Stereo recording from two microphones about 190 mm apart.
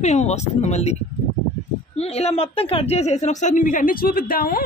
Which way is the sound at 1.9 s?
35° left (ahead or behind).